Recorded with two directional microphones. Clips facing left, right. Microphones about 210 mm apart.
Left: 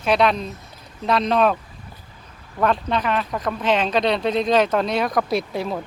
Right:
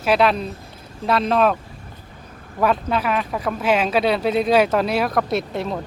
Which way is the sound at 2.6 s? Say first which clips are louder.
Right 1 dB; 5° right (ahead or behind).